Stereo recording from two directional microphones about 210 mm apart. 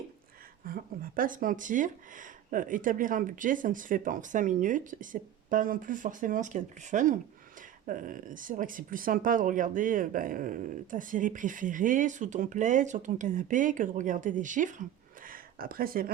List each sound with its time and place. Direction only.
0.6 s speech: 40° right (ahead or behind)